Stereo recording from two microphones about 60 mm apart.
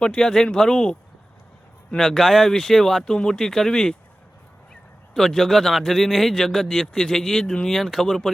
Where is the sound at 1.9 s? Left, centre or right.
Centre.